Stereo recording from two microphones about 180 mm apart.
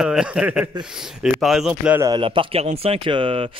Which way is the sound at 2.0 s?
25° right (ahead or behind).